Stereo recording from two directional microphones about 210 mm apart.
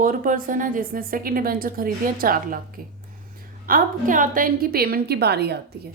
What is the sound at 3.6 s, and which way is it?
A woman's voice, 40° right (ahead or behind).